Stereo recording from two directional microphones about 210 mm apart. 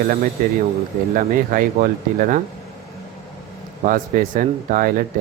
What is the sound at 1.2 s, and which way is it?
Speech, 40° right (ahead or behind).